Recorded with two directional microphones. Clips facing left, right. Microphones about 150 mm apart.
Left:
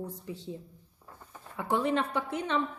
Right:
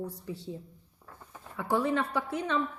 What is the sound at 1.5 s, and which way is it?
A woman's voice, 20° left (ahead or behind).